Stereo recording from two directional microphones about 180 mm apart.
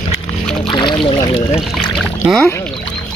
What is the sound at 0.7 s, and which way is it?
Speech, 25° left (ahead or behind).